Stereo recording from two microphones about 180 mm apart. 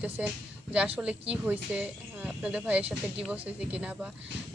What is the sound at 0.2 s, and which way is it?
Speech, 5° right (ahead or behind).